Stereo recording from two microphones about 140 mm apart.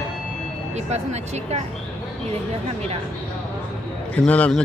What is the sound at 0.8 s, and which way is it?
Speech, 50° right (ahead or behind).